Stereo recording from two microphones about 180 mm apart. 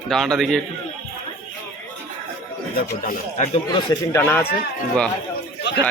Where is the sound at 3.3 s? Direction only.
35° left (ahead or behind).